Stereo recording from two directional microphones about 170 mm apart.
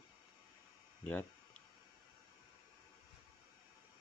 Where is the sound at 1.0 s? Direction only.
5° left (ahead or behind).